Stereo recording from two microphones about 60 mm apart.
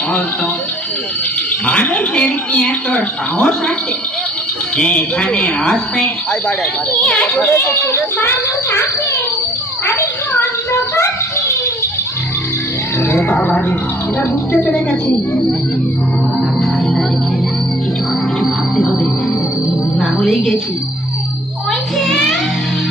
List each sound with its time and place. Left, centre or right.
1.6 s a woman's voice: left
4.8 s a woman's voice: left
7.0 s a child's voice: centre
7.4 s a child's voice: left
9.8 s a child's voice: left
10.8 s speech: left
13.1 s speech: left
18.4 s music: centre
20.0 s music: centre
21.7 s music: centre